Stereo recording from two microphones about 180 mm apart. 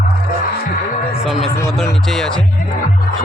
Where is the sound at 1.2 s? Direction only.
Centre (ahead or behind).